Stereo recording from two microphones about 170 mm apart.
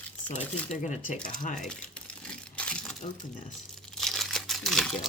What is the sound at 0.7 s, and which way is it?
Speech, 45° left (ahead or behind).